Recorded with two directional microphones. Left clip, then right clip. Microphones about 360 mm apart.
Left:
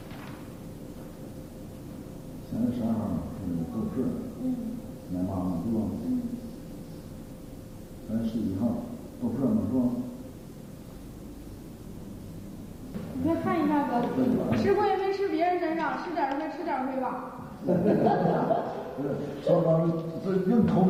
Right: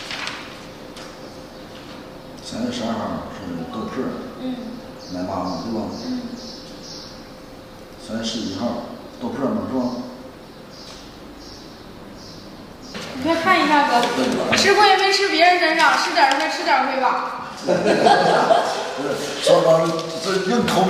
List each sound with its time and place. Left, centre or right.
0.1 s a sound: centre
2.7 s speech: centre
5.2 s speech: centre
8.1 s a man's voice: centre
8.5 s speech: centre
13.0 s a woman's voice: centre